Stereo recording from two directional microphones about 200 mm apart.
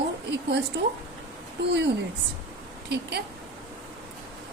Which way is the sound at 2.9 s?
55° right (ahead or behind).